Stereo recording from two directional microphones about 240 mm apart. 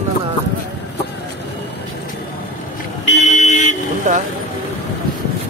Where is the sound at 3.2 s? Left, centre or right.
Left.